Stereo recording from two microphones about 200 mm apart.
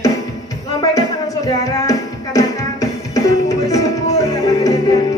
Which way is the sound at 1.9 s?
15° left (ahead or behind).